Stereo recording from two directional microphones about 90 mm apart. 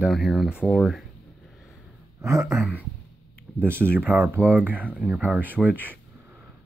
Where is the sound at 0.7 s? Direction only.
Centre (ahead or behind).